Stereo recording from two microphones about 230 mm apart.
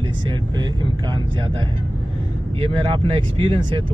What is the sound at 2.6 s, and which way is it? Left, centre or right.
Speech, right.